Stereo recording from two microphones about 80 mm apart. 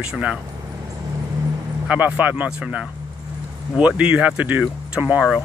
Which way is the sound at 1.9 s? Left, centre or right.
Centre.